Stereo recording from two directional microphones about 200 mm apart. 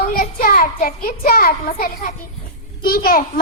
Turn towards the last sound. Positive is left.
turn(degrees=45)  # may be behind; listen again after turning